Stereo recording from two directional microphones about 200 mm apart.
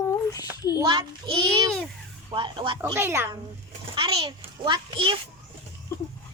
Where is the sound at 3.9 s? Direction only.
20° right (ahead or behind).